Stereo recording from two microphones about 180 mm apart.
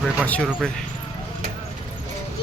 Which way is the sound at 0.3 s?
5° left (ahead or behind).